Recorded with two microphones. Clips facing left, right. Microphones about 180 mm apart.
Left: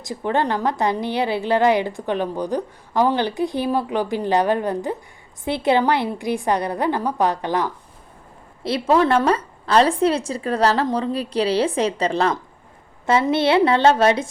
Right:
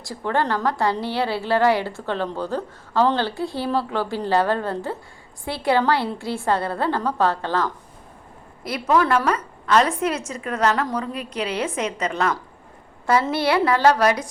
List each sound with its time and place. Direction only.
0.0 s a woman's voice: 20° left (ahead or behind)
8.6 s a woman's voice: 30° left (ahead or behind)